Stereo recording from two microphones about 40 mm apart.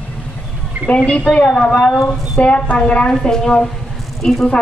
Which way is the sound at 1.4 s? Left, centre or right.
Centre.